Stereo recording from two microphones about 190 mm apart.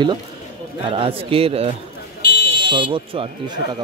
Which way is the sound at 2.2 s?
55° left (ahead or behind).